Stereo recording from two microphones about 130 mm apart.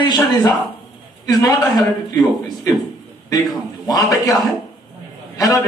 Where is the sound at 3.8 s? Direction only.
30° left (ahead or behind).